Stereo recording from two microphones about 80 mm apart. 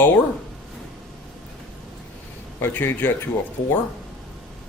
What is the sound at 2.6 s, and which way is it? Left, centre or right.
Speech, left.